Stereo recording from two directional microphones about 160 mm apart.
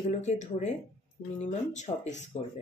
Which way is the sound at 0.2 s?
45° left (ahead or behind).